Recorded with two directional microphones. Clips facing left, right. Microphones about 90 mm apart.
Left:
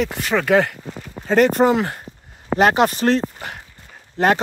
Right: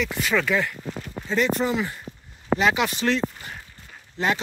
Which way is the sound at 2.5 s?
50° left (ahead or behind).